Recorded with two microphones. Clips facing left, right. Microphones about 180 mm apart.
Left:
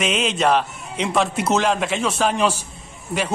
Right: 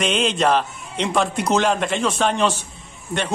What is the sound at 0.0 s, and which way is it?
A man's voice, 5° left (ahead or behind).